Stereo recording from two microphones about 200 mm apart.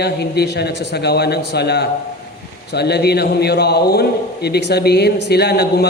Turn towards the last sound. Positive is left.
turn(degrees=55)  # may be behind; listen again after turning